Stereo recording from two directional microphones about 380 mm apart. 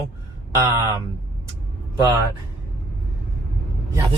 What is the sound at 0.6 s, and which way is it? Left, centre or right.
Speech, centre.